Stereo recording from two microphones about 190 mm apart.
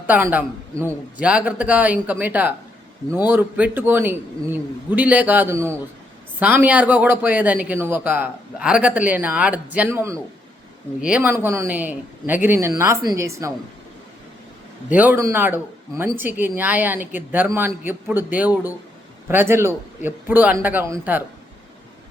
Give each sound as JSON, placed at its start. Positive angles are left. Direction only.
{"t": 0.1, "sound": "speech", "side_deg": -10}
{"t": 14.8, "sound": "speech", "side_deg": -10}